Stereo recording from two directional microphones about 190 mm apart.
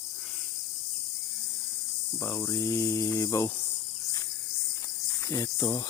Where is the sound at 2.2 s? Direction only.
15° left (ahead or behind).